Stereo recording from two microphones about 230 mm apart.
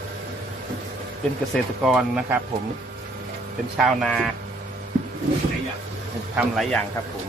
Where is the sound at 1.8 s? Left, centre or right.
Centre.